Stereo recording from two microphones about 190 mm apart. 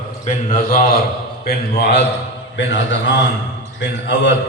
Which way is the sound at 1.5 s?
60° left (ahead or behind).